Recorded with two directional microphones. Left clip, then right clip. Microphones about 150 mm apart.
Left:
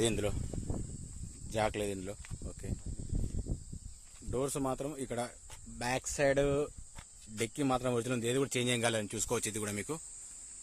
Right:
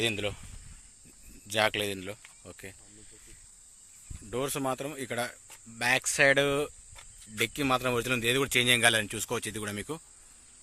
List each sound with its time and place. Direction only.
0.0 s speech: 30° left (ahead or behind)
1.5 s speech: 10° left (ahead or behind)
4.3 s speech: 5° left (ahead or behind)